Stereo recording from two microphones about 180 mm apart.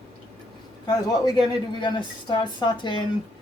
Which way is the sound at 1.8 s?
25° left (ahead or behind).